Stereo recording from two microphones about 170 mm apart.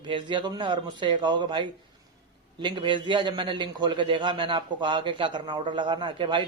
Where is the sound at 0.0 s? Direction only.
30° right (ahead or behind).